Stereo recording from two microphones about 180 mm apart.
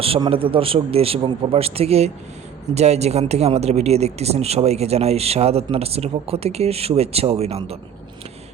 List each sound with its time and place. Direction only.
0.0 s speech: 30° right (ahead or behind)